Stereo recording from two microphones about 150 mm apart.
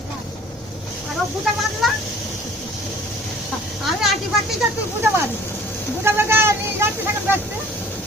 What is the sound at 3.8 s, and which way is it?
Vehicle, centre (ahead or behind).